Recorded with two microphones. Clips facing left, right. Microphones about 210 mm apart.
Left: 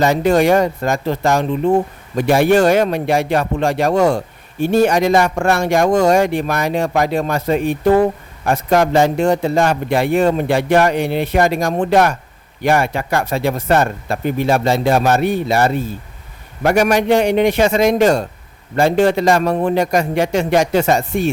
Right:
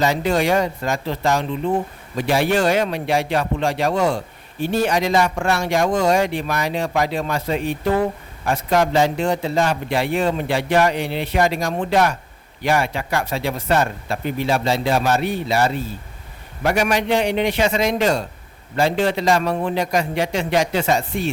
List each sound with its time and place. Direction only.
0.0 s a man's voice: 50° left (ahead or behind)